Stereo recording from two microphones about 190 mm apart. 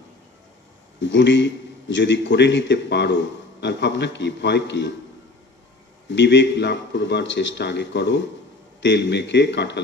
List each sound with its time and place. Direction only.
1.0 s a man's voice: 70° left (ahead or behind)
6.0 s a man's voice: 65° left (ahead or behind)